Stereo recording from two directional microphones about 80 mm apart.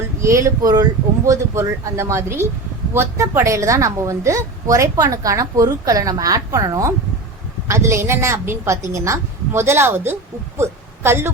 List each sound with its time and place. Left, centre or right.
0.2 s a woman's voice: right
0.6 s a woman's voice: right
1.2 s a woman's voice: right
7.7 s a woman's voice: right
10.6 s a sound: right